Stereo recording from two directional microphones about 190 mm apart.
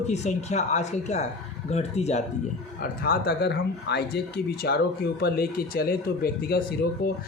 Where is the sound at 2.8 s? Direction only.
50° left (ahead or behind).